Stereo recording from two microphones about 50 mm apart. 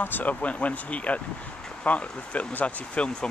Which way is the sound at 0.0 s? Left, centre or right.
Left.